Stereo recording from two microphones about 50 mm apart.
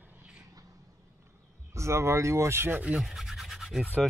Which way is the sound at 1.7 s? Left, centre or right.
Right.